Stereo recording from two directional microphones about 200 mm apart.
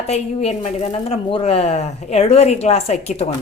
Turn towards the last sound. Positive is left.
turn(degrees=30)  # may be behind; listen again after turning